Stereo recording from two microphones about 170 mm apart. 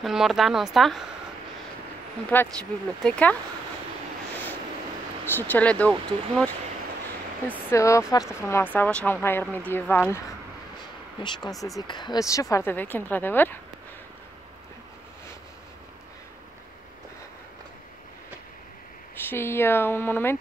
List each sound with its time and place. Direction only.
0.0 s a woman's voice: centre (ahead or behind)
2.3 s speech: 10° left (ahead or behind)
5.2 s speech: 10° left (ahead or behind)
7.7 s speech: 20° left (ahead or behind)
11.2 s speech: 30° left (ahead or behind); by 13.6 s 10° left (ahead or behind)
19.2 s speech: 15° left (ahead or behind)